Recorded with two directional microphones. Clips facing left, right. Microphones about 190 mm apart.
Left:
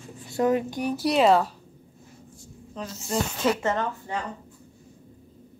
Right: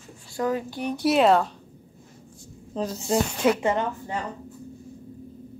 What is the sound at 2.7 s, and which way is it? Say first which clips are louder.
Speech: right 7 dB; 35° right (ahead or behind).